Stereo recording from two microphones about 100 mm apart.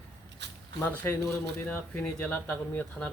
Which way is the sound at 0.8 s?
20° left (ahead or behind).